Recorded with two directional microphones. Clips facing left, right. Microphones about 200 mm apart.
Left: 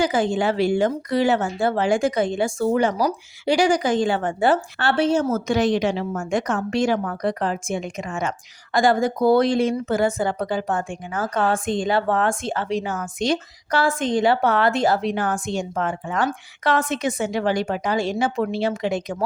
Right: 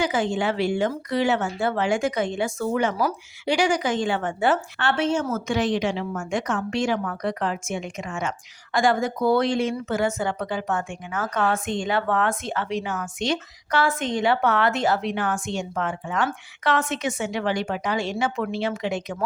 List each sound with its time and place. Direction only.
0.0 s speech: 35° left (ahead or behind)